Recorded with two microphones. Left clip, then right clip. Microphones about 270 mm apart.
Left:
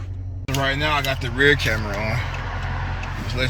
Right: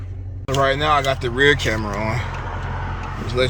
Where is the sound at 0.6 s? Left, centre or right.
Centre.